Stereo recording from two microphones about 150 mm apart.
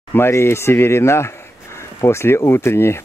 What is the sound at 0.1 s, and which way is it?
Speech, 15° left (ahead or behind).